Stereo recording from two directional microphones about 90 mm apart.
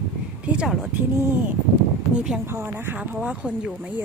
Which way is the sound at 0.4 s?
10° right (ahead or behind).